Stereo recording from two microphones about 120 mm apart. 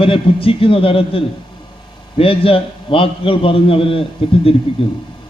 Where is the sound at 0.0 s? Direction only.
50° left (ahead or behind).